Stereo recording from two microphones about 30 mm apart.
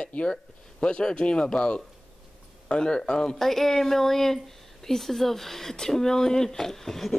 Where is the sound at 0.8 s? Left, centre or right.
Centre.